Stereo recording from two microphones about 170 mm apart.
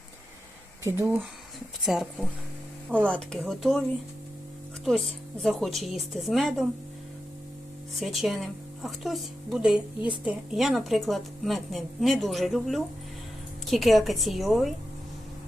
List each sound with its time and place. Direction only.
0.9 s speech: 15° right (ahead or behind)
1.8 s a woman's voice: centre (ahead or behind)
4.9 s a woman's voice: centre (ahead or behind)
7.9 s a woman's voice: centre (ahead or behind)